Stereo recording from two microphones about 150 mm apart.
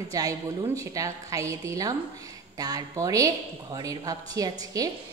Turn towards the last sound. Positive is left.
turn(degrees=-25)  # may be behind; listen again after turning